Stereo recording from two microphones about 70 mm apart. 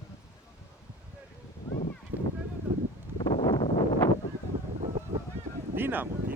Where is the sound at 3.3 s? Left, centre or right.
Left.